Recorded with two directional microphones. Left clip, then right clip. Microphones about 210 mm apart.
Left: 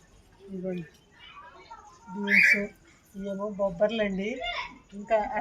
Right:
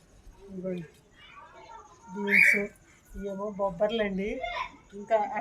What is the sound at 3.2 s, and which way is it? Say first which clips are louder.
Speech: left 1 dB; 15° left (ahead or behind).